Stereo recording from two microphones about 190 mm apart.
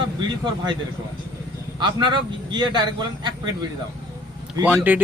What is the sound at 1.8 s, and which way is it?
A man's voice, 25° right (ahead or behind).